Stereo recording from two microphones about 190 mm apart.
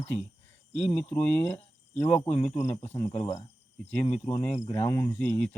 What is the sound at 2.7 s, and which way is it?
Speech, 35° left (ahead or behind).